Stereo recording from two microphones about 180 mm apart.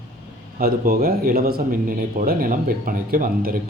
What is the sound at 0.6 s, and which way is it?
Speech, 55° right (ahead or behind).